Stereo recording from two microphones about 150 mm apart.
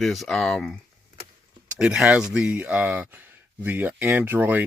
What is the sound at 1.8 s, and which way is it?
Speech, 5° right (ahead or behind).